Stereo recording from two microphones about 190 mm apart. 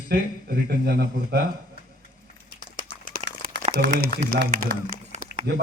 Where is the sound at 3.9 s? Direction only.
50° right (ahead or behind).